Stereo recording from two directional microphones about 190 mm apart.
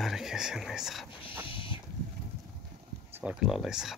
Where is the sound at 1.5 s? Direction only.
25° left (ahead or behind).